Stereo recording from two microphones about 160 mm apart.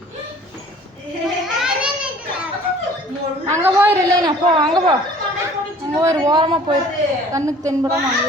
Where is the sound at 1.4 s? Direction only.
5° right (ahead or behind).